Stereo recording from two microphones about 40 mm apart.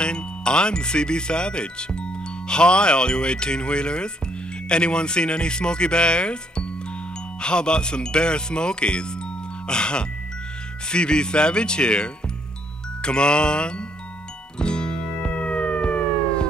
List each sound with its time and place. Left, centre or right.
0.0 s speech: left
14.6 s music: left